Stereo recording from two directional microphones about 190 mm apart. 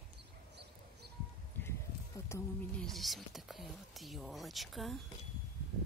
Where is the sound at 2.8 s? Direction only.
Centre (ahead or behind).